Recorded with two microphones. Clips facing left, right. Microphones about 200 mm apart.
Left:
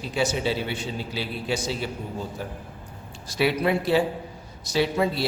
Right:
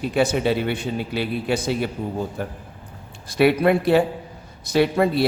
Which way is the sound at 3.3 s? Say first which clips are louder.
Right 6 dB; 55° right (ahead or behind).